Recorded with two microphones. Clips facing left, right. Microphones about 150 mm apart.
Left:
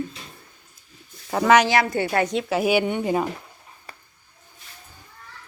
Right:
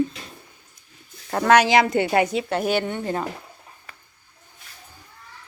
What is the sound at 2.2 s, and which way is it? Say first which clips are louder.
Speech: left 1 dB; centre (ahead or behind).